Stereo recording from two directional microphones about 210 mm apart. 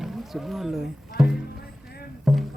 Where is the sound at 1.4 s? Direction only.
50° left (ahead or behind).